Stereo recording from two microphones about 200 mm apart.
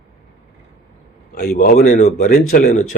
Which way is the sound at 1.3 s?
45° left (ahead or behind).